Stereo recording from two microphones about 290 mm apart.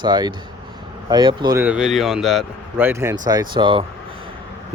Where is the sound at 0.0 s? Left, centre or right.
Centre.